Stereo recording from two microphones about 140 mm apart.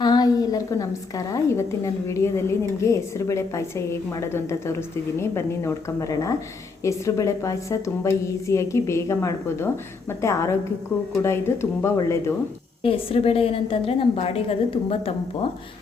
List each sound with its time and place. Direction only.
0.0 s a woman's voice: 30° left (ahead or behind)
12.8 s a woman's voice: 40° left (ahead or behind)